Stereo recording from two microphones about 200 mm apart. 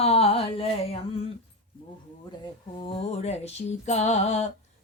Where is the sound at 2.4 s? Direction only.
25° left (ahead or behind).